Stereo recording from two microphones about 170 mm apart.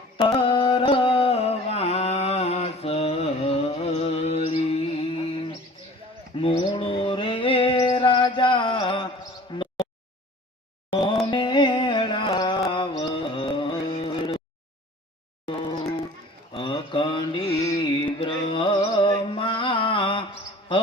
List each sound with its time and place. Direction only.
0.2 s carnatic music: 30° left (ahead or behind)
6.3 s mantra: 30° left (ahead or behind)
9.5 s insect: 30° left (ahead or behind)
10.9 s a sound: 30° left (ahead or behind)
12.7 s mantra: 30° left (ahead or behind)
16.5 s mantra: 30° left (ahead or behind)